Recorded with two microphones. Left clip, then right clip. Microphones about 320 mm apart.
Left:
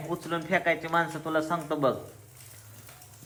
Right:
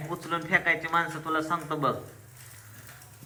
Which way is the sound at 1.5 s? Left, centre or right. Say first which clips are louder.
Left 1 dB; centre.